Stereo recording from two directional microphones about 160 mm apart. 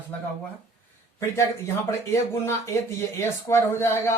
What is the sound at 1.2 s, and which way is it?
Speech, 20° left (ahead or behind).